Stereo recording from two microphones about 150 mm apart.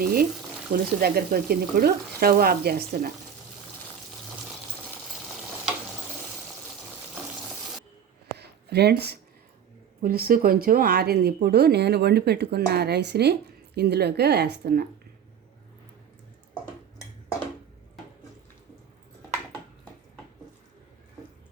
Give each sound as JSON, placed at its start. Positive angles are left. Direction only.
{"t": 0.0, "sound": "speech", "side_deg": -80}
{"t": 8.4, "sound": "a sound", "side_deg": -90}
{"t": 10.0, "sound": "speech", "side_deg": -75}